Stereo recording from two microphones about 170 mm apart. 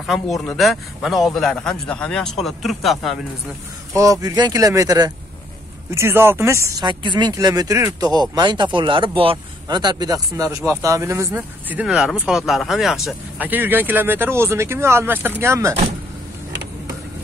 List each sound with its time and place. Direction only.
0.0 s a man's voice: centre (ahead or behind)
3.9 s speech: 20° right (ahead or behind)
6.8 s speech: 30° right (ahead or behind)